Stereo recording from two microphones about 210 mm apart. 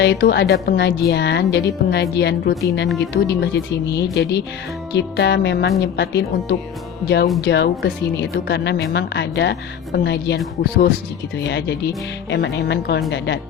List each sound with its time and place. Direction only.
0.0 s speech: 55° left (ahead or behind)